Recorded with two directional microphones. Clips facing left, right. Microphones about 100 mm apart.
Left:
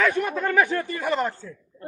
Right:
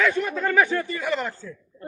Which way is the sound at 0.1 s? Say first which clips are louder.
Even; 55° left (ahead or behind).